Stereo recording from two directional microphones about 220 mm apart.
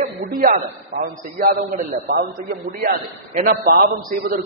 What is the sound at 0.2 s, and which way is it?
A man's voice, 40° right (ahead or behind).